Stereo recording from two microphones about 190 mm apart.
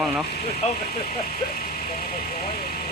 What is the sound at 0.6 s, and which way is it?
Speech, 35° left (ahead or behind).